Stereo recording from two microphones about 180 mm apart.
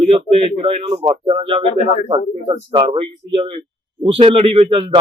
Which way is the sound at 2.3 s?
30° right (ahead or behind).